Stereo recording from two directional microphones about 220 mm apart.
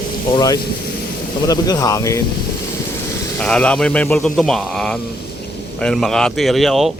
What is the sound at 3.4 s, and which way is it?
Speech, 5° left (ahead or behind).